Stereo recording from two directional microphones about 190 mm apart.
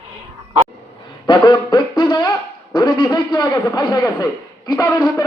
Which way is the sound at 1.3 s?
25° left (ahead or behind).